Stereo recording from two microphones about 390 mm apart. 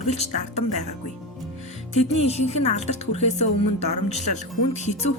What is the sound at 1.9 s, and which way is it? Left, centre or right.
Speech, centre.